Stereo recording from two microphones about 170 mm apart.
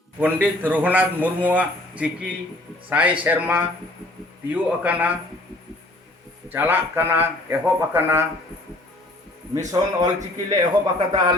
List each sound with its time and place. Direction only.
0.2 s a man's voice: 10° right (ahead or behind)
4.8 s a man's voice: 10° right (ahead or behind)
6.5 s a man's voice: 10° right (ahead or behind)
9.6 s a man's voice: 20° right (ahead or behind)